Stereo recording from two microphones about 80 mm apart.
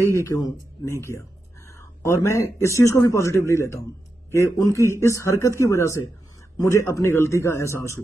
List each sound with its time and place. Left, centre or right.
0.2 s speech: left
1.7 s a sound: left
2.2 s speech: left